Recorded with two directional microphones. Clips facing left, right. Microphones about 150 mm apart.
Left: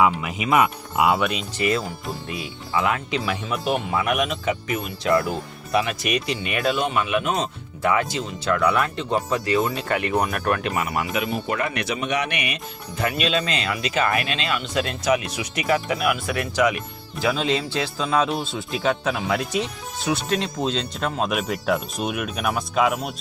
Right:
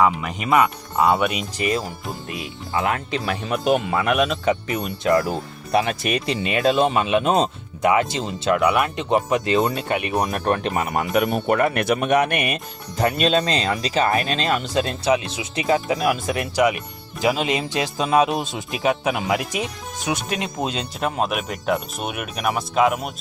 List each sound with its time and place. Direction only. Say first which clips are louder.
0.0 s speech: right 1 dB; 5° left (ahead or behind)
2.7 s speech: even; 40° right (ahead or behind); by 10.7 s 25° right (ahead or behind)
10.7 s speech: right 2 dB; 40° right (ahead or behind)
11.1 s speech: right 6 dB; 55° right (ahead or behind); by 23.0 s centre (ahead or behind)